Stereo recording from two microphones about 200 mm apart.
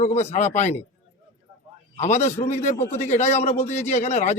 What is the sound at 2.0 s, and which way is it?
A man's voice, 35° left (ahead or behind).